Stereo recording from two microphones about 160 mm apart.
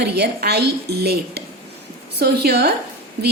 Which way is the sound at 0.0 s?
90° right.